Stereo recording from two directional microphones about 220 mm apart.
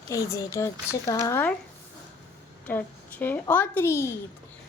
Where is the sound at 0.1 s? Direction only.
15° left (ahead or behind).